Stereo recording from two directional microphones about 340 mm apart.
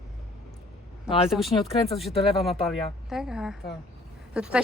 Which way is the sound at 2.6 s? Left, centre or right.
Centre.